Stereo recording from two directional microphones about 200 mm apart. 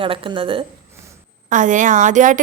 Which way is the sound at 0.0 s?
25° right (ahead or behind).